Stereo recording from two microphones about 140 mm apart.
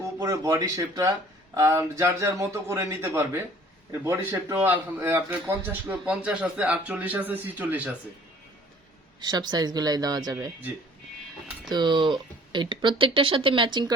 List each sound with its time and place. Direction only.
0.2 s speech: 25° right (ahead or behind)
4.4 s a man's voice: 15° right (ahead or behind)
9.2 s speech: 30° right (ahead or behind)
11.7 s speech: 35° right (ahead or behind)